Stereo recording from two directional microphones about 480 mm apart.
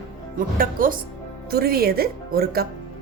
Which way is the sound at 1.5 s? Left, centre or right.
Centre.